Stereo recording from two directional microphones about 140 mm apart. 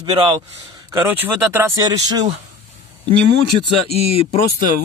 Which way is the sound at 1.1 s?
15° right (ahead or behind).